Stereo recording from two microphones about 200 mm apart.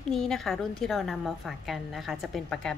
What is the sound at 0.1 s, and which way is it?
A woman's voice, centre (ahead or behind).